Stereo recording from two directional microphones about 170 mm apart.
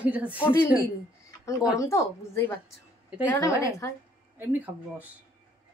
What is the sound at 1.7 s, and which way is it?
A woman's voice, 15° left (ahead or behind).